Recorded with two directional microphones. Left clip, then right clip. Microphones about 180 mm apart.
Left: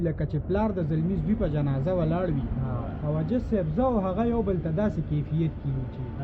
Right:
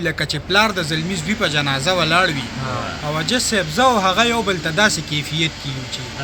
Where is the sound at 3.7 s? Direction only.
25° right (ahead or behind).